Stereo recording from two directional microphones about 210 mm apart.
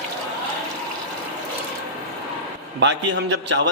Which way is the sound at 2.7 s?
55° right (ahead or behind).